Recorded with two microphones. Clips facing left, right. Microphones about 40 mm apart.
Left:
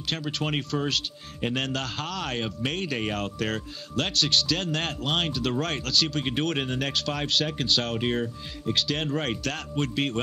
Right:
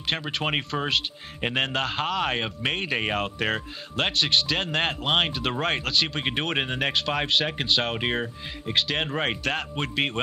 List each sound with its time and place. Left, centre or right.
0.0 s speech: right